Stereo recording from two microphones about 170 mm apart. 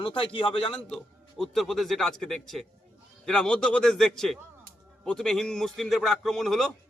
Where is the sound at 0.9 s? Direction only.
5° left (ahead or behind).